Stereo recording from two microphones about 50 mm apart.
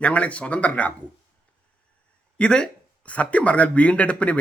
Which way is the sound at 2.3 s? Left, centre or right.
Centre.